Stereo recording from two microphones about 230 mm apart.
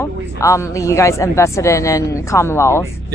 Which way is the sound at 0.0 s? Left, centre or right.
Centre.